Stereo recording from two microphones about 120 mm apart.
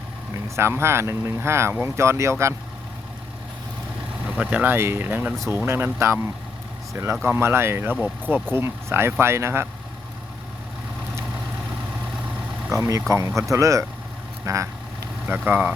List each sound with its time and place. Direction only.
0.4 s speech: 20° right (ahead or behind)
4.3 s speech: 10° right (ahead or behind)
12.7 s speech: 25° right (ahead or behind)
15.3 s speech: 15° right (ahead or behind)